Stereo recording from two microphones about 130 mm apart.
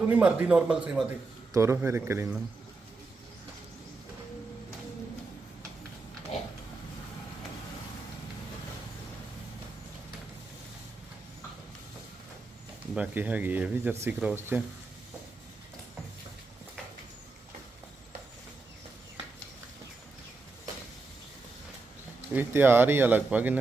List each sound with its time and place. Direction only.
0.1 s speech: 10° right (ahead or behind)
1.5 s a man's voice: 20° right (ahead or behind)
12.9 s speech: 10° right (ahead or behind)
22.3 s speech: 15° right (ahead or behind)